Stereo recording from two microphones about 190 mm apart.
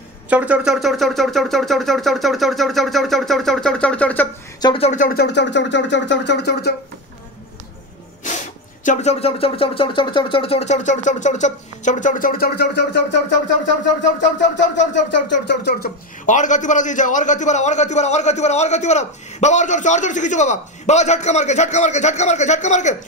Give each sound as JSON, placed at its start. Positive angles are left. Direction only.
{"t": 0.3, "sound": "speech", "side_deg": -5}
{"t": 4.6, "sound": "a man's voice", "side_deg": 25}
{"t": 5.0, "sound": "a sound", "side_deg": 55}
{"t": 8.8, "sound": "a man's voice", "side_deg": 35}
{"t": 16.3, "sound": "a man's voice", "side_deg": 40}